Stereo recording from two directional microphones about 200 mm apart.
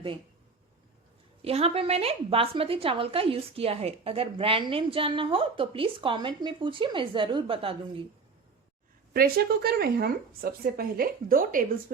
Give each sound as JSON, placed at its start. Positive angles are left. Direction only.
{"t": 1.4, "sound": "a woman's voice", "side_deg": -30}
{"t": 9.1, "sound": "speech", "side_deg": -50}